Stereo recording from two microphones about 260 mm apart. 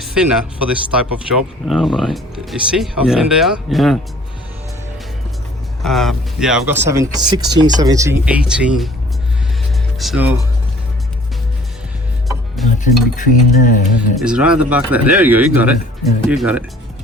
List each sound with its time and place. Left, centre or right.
0.0 s speech: centre
5.8 s speech: centre
10.0 s speech: centre
12.8 s speech: left
14.2 s speech: centre